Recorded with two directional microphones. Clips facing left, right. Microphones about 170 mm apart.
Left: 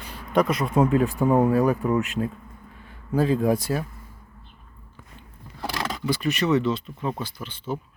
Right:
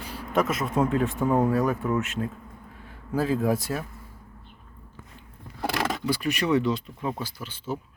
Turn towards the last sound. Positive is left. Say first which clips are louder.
# left 2 dB
turn(degrees=-5)  # may be behind; listen again after turning